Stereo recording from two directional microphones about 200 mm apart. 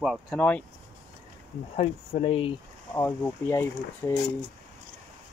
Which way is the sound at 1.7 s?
35° left (ahead or behind).